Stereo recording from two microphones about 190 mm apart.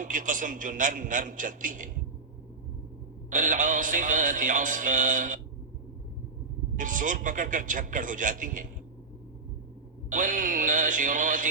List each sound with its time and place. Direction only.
0.0 s music: 45° right (ahead or behind)
3.2 s music: 45° right (ahead or behind)
6.7 s music: 45° right (ahead or behind)
10.1 s music: 45° right (ahead or behind)